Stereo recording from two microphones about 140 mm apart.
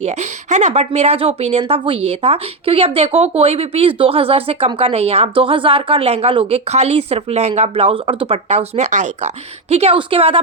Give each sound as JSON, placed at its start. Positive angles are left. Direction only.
{"t": 0.0, "sound": "a woman's voice", "side_deg": -55}
{"t": 8.4, "sound": "a woman's voice", "side_deg": -50}